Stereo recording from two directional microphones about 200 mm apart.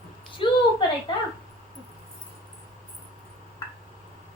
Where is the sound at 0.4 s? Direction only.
25° left (ahead or behind).